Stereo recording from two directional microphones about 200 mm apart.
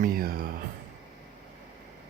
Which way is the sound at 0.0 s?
45° right (ahead or behind).